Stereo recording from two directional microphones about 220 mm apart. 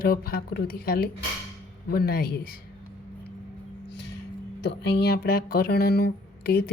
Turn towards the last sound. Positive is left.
turn(degrees=45)  # may be behind; listen again after turning